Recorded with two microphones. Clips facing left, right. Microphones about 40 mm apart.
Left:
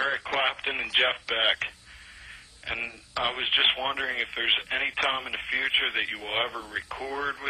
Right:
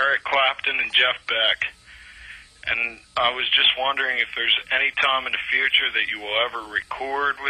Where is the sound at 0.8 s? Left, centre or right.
Right.